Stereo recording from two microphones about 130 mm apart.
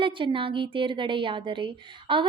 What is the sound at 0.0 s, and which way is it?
A woman's voice, 40° right (ahead or behind).